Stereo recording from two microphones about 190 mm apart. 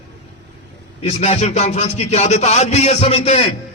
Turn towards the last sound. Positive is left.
turn(degrees=35)  # may be behind; listen again after turning